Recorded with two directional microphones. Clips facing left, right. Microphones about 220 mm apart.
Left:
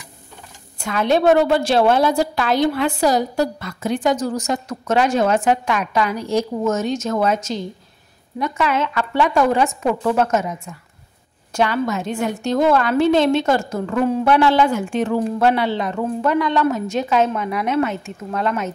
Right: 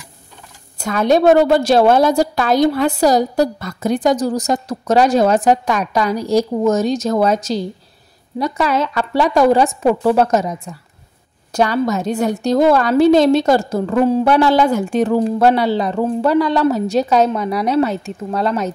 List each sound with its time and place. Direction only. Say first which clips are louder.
0.7 s a woman's voice: right 4 dB; 40° right (ahead or behind)